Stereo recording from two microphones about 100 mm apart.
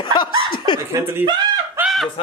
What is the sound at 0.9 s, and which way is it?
Speech, 20° right (ahead or behind).